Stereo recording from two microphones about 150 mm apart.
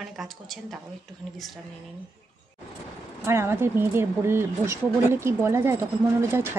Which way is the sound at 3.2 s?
15° right (ahead or behind).